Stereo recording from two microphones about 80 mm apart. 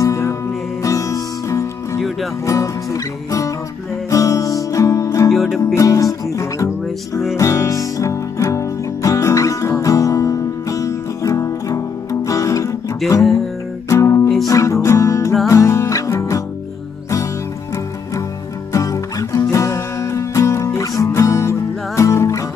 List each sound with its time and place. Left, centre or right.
0.0 s music: left
5.3 s music: centre
5.8 s music: left
7.3 s music: left
13.8 s music: left
18.7 s music: left